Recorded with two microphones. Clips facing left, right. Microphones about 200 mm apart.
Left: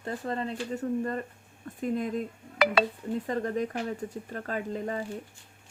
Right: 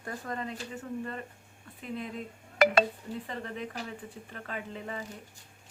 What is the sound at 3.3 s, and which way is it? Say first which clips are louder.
Speech: left 9 dB; 40° left (ahead or behind).